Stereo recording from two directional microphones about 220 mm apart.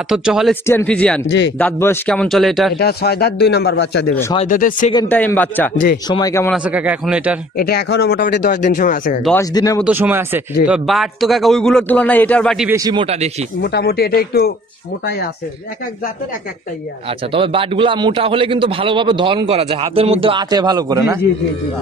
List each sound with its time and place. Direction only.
0.1 s a man's voice: centre (ahead or behind)
2.8 s a man's voice: 45° left (ahead or behind)
4.1 s a man's voice: 10° left (ahead or behind)
4.4 s speech: 40° left (ahead or behind)
5.0 s a man's voice: 5° left (ahead or behind)
6.5 s a man's voice: 5° right (ahead or behind)
7.5 s speech: 45° left (ahead or behind)
9.2 s a man's voice: 10° left (ahead or behind)
9.8 s a man's voice: 10° right (ahead or behind)
12.6 s a man's voice: 15° right (ahead or behind)
13.6 s a man's voice: 45° left (ahead or behind)
17.3 s a man's voice: 25° right (ahead or behind)